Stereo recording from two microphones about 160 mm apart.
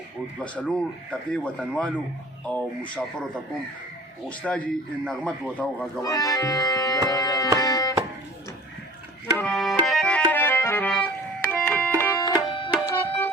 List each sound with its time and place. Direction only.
0.3 s a man's voice: 5° left (ahead or behind)
4.3 s a man's voice: 10° left (ahead or behind)
6.0 s organ: 20° left (ahead or behind)
7.1 s tabla: 20° left (ahead or behind)
9.4 s music: 5° left (ahead or behind)
12.2 s music: 30° left (ahead or behind)
12.9 s tabla: 15° left (ahead or behind)